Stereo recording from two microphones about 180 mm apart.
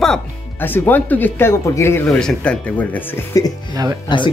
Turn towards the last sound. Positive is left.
turn(degrees=25)  # may be behind; listen again after turning